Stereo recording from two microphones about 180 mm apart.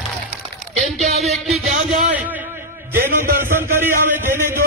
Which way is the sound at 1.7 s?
45° right (ahead or behind).